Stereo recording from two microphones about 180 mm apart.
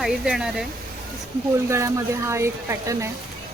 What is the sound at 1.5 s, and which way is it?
Speech, 15° right (ahead or behind).